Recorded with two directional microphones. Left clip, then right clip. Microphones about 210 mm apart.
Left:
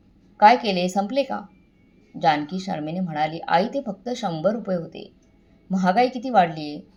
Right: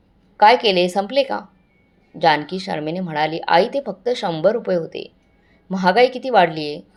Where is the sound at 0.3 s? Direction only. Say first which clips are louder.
Right 3 dB; 15° right (ahead or behind).